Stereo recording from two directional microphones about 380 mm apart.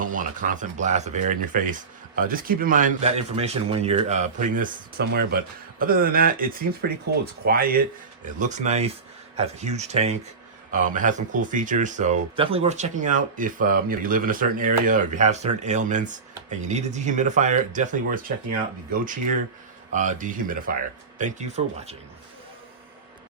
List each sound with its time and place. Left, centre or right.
0.0 s speech: right
19.9 s speech: centre